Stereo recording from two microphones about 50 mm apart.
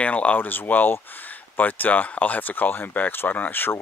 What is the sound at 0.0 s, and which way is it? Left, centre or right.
Speech, left.